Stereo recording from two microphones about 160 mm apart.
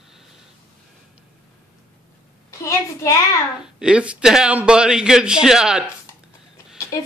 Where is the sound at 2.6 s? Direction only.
20° left (ahead or behind).